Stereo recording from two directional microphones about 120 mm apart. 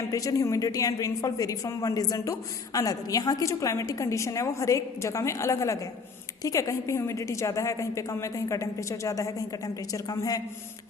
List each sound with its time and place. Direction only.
0.1 s a woman's voice: 30° left (ahead or behind)